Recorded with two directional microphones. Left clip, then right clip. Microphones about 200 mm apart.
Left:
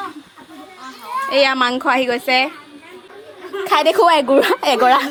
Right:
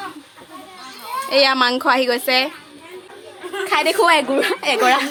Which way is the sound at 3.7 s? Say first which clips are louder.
Left 3 dB; 35° left (ahead or behind).